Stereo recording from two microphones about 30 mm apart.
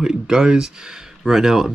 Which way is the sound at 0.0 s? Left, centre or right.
Right.